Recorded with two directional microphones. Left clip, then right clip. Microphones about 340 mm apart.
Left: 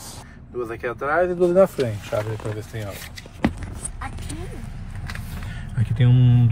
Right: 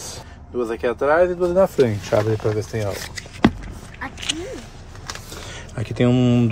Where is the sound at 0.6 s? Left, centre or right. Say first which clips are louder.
Right 6 dB; centre.